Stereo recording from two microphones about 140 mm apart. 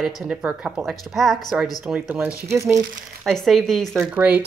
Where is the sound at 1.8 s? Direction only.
10° right (ahead or behind).